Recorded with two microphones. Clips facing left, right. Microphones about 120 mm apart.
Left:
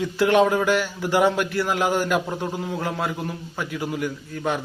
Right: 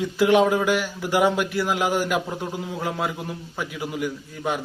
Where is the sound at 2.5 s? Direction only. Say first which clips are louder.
Left 2 dB; 20° left (ahead or behind).